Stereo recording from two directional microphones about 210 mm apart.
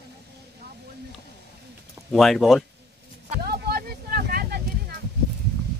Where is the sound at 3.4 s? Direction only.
50° right (ahead or behind).